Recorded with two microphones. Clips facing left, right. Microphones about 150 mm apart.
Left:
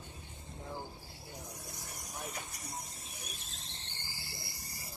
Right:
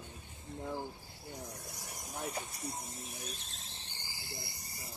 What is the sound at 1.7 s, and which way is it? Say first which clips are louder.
Speech: right 4 dB; 20° right (ahead or behind).